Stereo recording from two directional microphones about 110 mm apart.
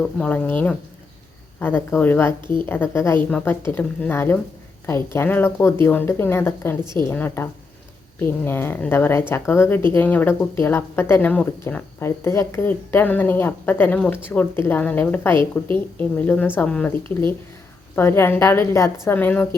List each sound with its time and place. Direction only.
0.0 s a woman's voice: 10° left (ahead or behind)
8.4 s a woman's voice: 20° left (ahead or behind)